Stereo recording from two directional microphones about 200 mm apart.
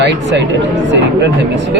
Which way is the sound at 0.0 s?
60° right (ahead or behind).